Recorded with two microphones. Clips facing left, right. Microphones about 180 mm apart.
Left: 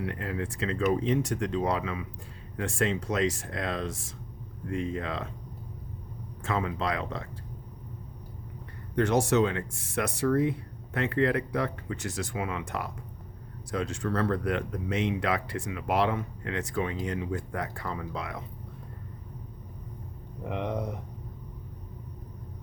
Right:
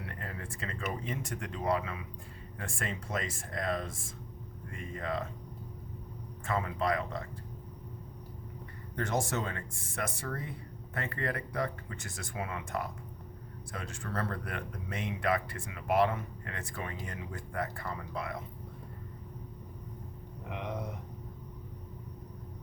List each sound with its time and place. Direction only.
0.0 s speech: 80° left
6.4 s speech: 80° left
9.0 s speech: 75° left (ahead or behind)